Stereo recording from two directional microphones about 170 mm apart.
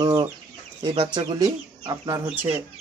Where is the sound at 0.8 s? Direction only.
25° right (ahead or behind).